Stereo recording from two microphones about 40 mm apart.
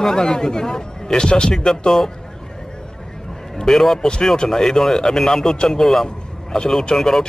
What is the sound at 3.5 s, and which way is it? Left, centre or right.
A man's voice, centre.